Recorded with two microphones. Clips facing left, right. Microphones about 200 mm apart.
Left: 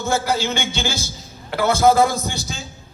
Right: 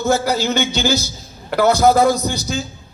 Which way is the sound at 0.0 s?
40° right (ahead or behind).